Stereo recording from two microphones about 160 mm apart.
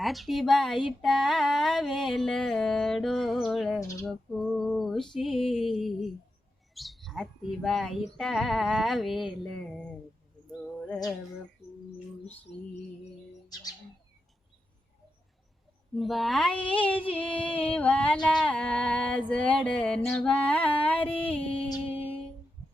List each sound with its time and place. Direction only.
0.0 s speech: centre (ahead or behind)
4.0 s female singing: centre (ahead or behind)
6.7 s speech: centre (ahead or behind)
10.8 s a sound: 5° left (ahead or behind)
13.5 s bird: 25° left (ahead or behind)
16.0 s speech: centre (ahead or behind)
17.1 s music: 10° left (ahead or behind)
17.3 s music: 35° left (ahead or behind)
17.6 s music: 10° left (ahead or behind)